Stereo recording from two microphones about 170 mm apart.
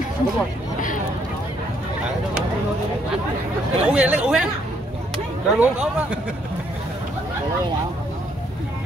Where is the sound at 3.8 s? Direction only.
5° right (ahead or behind).